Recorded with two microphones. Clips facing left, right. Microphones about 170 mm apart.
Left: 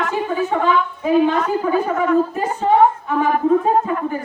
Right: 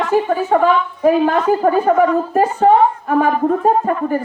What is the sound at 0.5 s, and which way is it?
A woman's voice, 50° right (ahead or behind).